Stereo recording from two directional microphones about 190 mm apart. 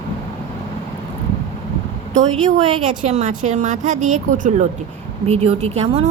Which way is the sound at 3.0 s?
35° right (ahead or behind).